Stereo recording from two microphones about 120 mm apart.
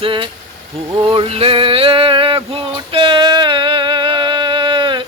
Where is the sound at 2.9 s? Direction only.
45° right (ahead or behind).